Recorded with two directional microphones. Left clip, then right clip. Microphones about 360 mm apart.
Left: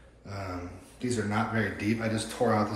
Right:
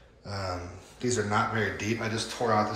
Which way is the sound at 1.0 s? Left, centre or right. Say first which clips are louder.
Right 3 dB; centre.